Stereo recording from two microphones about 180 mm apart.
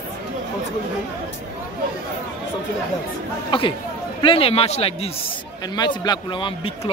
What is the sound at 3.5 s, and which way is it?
A man's voice, 30° left (ahead or behind).